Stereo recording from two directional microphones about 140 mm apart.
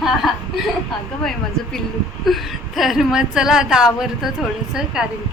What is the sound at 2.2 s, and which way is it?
Speech, centre (ahead or behind).